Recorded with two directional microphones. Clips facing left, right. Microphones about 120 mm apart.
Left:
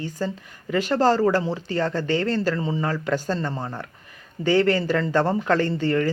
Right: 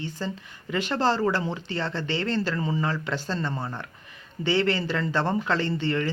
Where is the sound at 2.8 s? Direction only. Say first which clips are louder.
Left 4 dB; 45° left (ahead or behind).